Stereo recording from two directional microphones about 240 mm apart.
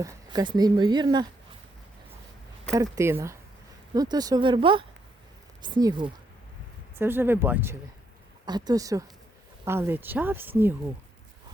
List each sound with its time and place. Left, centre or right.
0.0 s speech: centre
2.7 s speech: centre